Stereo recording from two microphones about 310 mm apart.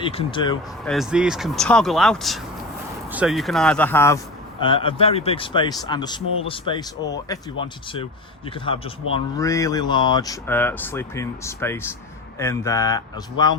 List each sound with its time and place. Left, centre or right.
0.0 s speech: centre
0.9 s speech: centre